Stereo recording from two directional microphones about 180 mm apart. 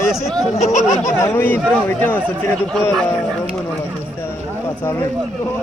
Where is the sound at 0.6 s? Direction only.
40° left (ahead or behind).